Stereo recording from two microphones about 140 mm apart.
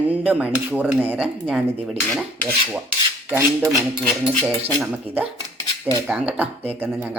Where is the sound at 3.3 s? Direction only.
20° right (ahead or behind).